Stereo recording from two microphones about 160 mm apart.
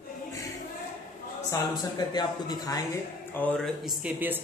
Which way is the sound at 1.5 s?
25° left (ahead or behind).